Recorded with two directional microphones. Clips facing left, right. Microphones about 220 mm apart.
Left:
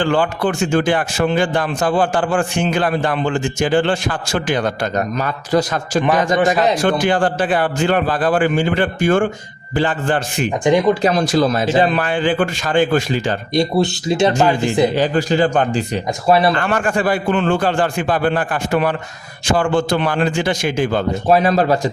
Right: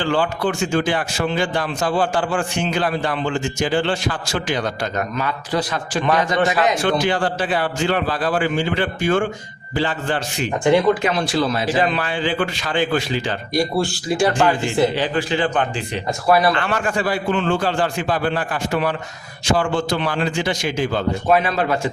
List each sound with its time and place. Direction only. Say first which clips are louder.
0.0 s speech: left 3 dB; 50° left (ahead or behind)
4.9 s a man's voice: left 3 dB; 40° left (ahead or behind)
7.0 s speech: left 4 dB; 50° left (ahead or behind)
10.6 s speech: left 1 dB; 15° left (ahead or behind)
11.0 s speech: left 5 dB; 45° left (ahead or behind)
13.5 s speech: left 3 dB; 20° left (ahead or behind)
14.9 s a man's voice: left 5 dB; 40° left (ahead or behind)
16.2 s speech: left 2 dB; 25° left (ahead or behind)
16.6 s speech: left 3 dB; 50° left (ahead or behind)
21.2 s a man's voice: left 5 dB; 40° left (ahead or behind)